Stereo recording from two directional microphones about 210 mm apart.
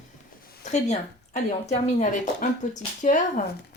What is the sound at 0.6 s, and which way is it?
Speech, 35° left (ahead or behind).